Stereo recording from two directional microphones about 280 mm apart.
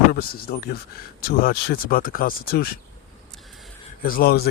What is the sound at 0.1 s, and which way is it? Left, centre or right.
Speech, left.